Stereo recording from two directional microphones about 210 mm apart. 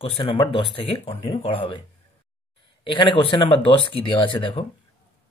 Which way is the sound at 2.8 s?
25° left (ahead or behind).